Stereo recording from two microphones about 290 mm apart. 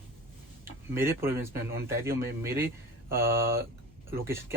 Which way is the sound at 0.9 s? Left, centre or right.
Centre.